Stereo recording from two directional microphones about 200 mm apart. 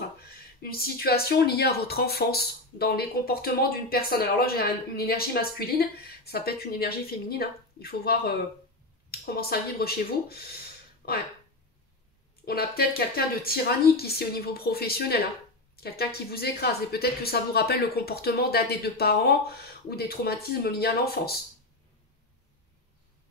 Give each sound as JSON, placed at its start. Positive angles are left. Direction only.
{"t": 0.6, "sound": "speech", "side_deg": 50}
{"t": 12.4, "sound": "speech", "side_deg": 50}